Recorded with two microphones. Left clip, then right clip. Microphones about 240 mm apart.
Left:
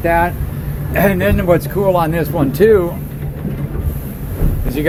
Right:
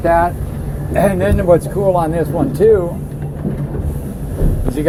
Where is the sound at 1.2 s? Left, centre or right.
Left.